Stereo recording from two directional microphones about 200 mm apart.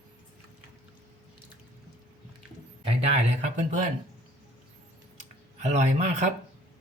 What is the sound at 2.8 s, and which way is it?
Speech, 30° right (ahead or behind).